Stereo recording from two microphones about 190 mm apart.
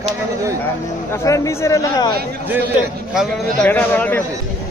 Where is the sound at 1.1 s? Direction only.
15° left (ahead or behind).